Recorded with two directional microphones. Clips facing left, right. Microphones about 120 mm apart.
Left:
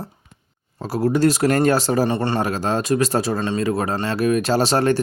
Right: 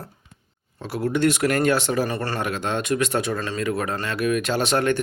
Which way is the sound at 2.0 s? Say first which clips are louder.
Left 6 dB; 25° left (ahead or behind).